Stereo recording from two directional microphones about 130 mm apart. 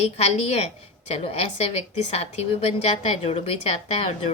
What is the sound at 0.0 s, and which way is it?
A woman's voice, 55° left (ahead or behind).